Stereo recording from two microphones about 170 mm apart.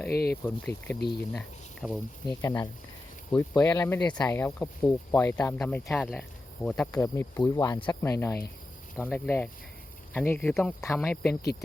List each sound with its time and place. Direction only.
0.1 s speech: 70° left (ahead or behind)
0.4 s speech: 10° left (ahead or behind)
2.3 s speech: 20° left (ahead or behind); by 7.0 s 5° left (ahead or behind)
7.0 s speech: 15° left (ahead or behind)